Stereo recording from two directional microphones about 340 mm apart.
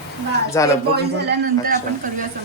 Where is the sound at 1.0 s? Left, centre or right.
Right.